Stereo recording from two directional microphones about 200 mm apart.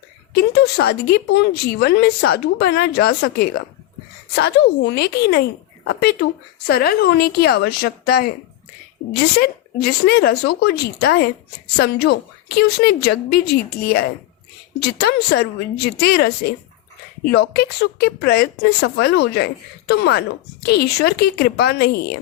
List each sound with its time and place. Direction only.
0.3 s speech: 55° left (ahead or behind)